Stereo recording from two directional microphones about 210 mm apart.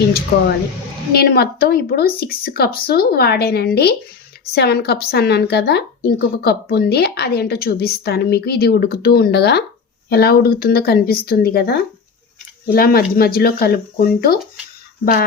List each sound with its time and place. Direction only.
1.1 s a woman's voice: 50° left (ahead or behind)